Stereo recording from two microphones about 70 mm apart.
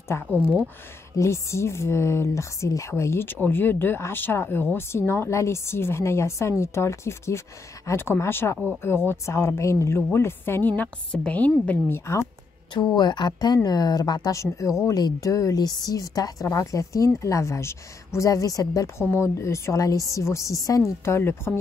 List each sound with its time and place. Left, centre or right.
0.3 s speech: right
1.1 s a woman's voice: left
11.1 s a woman's voice: centre
11.9 s a woman's voice: left
12.7 s speech: left
13.7 s speech: left
14.3 s speech: left
18.9 s speech: left
19.8 s speech: left
21.0 s a woman's voice: left